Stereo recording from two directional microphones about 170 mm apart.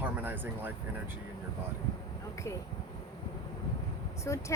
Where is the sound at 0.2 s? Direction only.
10° right (ahead or behind).